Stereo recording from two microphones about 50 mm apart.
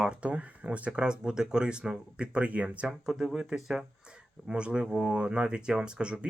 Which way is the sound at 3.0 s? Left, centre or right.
Centre.